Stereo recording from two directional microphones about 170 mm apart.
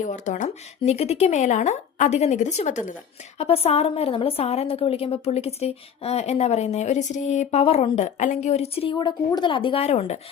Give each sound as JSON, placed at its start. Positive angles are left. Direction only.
{"t": 0.0, "sound": "a woman's voice", "side_deg": 45}